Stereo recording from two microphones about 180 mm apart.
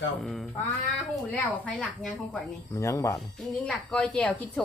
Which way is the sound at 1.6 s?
5° left (ahead or behind).